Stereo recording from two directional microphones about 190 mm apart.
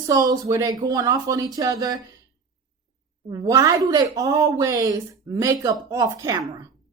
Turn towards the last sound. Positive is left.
turn(degrees=-15)  # may be behind; listen again after turning